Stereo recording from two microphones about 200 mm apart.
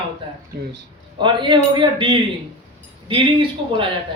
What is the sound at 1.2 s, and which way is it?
Speech, 25° right (ahead or behind).